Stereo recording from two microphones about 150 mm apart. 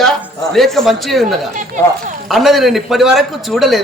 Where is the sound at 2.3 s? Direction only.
Centre (ahead or behind).